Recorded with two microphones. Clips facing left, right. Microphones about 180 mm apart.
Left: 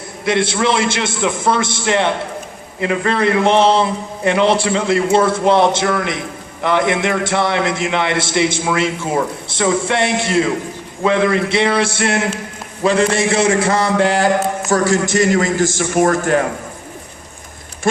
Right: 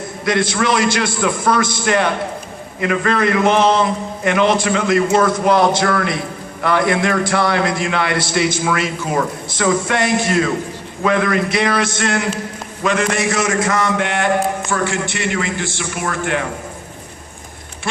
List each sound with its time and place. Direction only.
0.3 s a man's voice: 25° left (ahead or behind)